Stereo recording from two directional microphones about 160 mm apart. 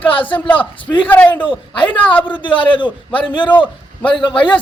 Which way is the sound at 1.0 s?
10° left (ahead or behind).